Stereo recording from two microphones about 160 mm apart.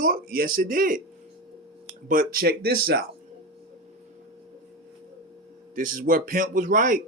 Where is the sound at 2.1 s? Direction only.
60° right (ahead or behind).